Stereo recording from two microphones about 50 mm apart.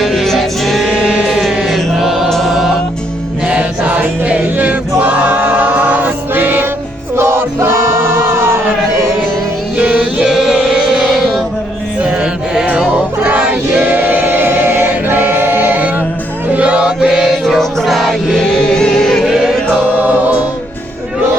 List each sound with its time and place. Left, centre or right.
0.0 s music: centre
1.6 s chant: centre
2.3 s music: centre
3.4 s music: right
7.2 s music: right
9.7 s music: right
10.2 s music: centre
12.0 s music: centre; by 14.3 s right
14.3 s choir: right
16.5 s chant: right
17.3 s music: centre
18.4 s music: centre
19.3 s choir: centre